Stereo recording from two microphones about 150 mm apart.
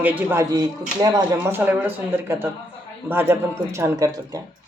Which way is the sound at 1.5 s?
10° right (ahead or behind).